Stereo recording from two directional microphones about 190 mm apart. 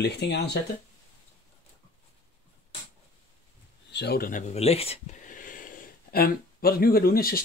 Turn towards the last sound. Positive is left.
turn(degrees=50)  # may be behind; listen again after turning